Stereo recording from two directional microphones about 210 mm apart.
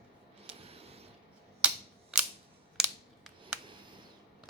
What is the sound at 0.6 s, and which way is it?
Printer, 30° right (ahead or behind).